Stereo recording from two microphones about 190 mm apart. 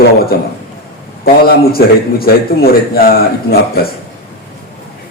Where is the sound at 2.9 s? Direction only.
50° left (ahead or behind).